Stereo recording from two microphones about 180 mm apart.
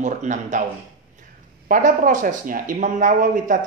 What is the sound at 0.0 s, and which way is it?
Speech, 40° right (ahead or behind).